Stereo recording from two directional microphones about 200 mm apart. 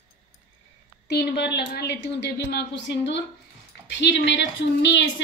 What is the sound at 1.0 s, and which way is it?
A woman's voice, 55° left (ahead or behind).